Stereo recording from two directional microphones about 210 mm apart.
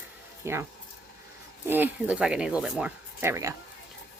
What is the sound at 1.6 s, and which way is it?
Speech, 10° right (ahead or behind).